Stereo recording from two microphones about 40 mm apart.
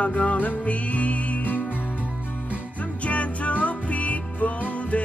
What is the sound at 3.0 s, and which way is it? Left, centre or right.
Music, left.